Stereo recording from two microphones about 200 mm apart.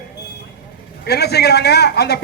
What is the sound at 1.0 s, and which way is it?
A man's voice, 55° left (ahead or behind).